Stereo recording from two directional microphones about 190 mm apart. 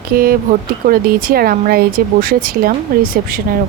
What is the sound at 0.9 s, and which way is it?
Speech, 50° right (ahead or behind).